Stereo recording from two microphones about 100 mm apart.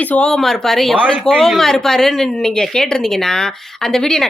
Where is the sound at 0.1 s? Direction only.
10° left (ahead or behind).